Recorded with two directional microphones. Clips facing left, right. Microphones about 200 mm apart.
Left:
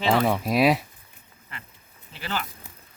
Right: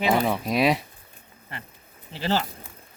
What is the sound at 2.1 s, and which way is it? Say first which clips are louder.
Speech: right 6 dB; 30° right (ahead or behind).